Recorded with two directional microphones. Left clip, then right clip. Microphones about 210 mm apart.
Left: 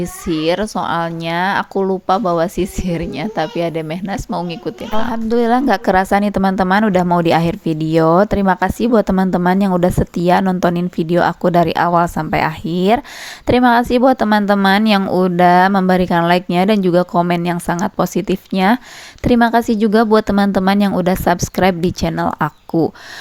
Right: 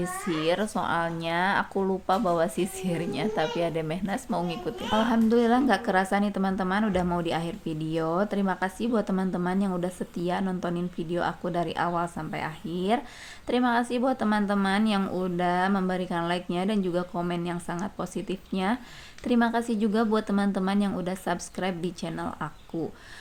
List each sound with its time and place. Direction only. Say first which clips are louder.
0.0 s speech: left 9 dB; 30° left (ahead or behind)